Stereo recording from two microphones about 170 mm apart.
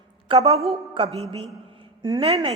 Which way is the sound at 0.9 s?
35° right (ahead or behind).